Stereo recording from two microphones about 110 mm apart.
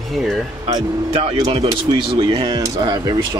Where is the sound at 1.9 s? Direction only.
45° right (ahead or behind).